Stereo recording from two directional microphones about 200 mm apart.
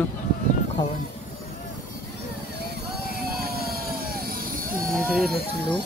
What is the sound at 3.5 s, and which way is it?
Helicopter, 50° right (ahead or behind).